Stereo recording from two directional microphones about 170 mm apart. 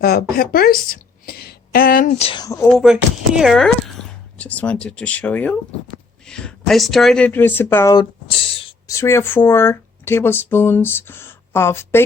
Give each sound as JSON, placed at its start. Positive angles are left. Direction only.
{"t": 0.0, "sound": "a woman's voice", "side_deg": 65}
{"t": 2.1, "sound": "a woman's voice", "side_deg": 35}
{"t": 2.4, "sound": "speech", "side_deg": 20}
{"t": 2.6, "sound": "speech", "side_deg": 0}